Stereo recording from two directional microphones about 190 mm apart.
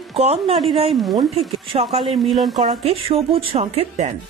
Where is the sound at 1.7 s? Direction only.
25° right (ahead or behind).